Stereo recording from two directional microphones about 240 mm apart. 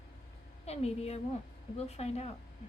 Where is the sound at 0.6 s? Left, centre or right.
Left.